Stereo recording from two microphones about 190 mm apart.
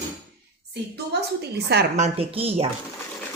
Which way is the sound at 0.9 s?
60° right (ahead or behind).